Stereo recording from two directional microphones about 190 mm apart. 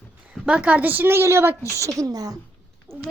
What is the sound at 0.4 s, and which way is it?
A woman's voice, 5° right (ahead or behind).